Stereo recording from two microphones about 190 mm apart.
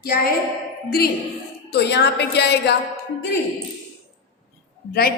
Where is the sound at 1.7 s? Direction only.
60° left (ahead or behind).